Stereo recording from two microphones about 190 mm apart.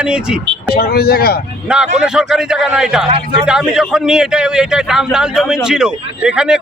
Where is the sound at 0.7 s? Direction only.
55° left (ahead or behind).